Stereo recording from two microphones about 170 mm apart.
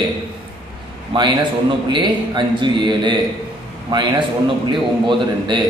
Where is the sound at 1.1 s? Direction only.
25° right (ahead or behind).